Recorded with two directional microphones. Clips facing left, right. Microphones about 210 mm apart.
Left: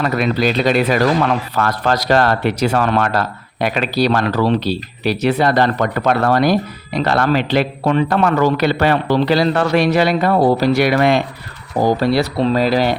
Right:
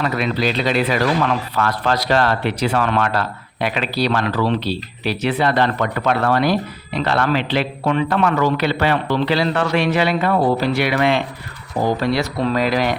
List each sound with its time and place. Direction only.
0.0 s a man's voice: 45° left (ahead or behind)